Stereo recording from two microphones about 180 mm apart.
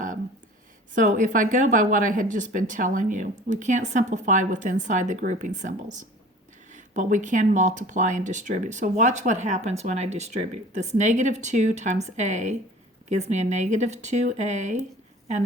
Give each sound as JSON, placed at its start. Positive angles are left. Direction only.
{"t": 0.9, "sound": "speech", "side_deg": -45}